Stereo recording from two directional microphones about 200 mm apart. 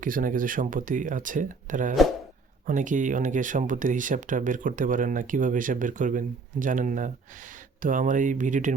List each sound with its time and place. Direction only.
0.0 s speech: 45° right (ahead or behind)